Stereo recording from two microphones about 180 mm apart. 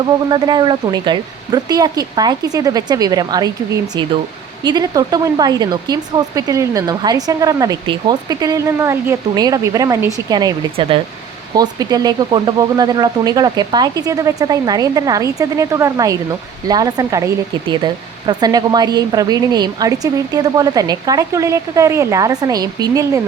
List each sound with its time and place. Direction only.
0.0 s speech: 25° right (ahead or behind)